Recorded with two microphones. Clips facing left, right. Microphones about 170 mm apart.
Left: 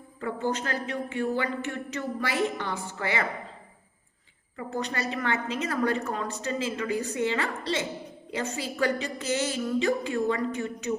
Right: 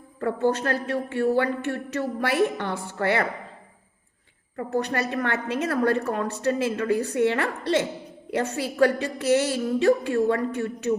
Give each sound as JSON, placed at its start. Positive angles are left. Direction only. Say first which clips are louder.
{"t": 0.2, "sound": "a woman's voice", "louder": "right 6 dB", "side_deg": -55}
{"t": 4.5, "sound": "a woman's voice", "louder": "right 6 dB", "side_deg": -55}